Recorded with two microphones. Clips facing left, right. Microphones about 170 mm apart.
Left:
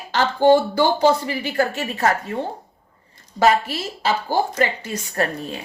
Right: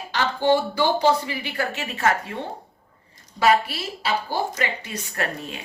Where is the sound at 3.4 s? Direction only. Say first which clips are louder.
Left 2 dB; 45° left (ahead or behind).